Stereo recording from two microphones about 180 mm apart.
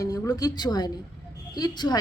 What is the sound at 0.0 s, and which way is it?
A woman's voice, 20° left (ahead or behind).